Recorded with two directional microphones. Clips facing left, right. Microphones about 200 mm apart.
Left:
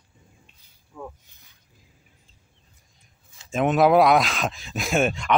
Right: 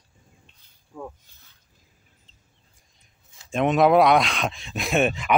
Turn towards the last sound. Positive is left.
turn(degrees=0)  # may be behind; listen again after turning